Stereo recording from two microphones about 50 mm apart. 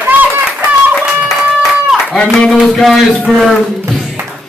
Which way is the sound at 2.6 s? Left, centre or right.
Centre.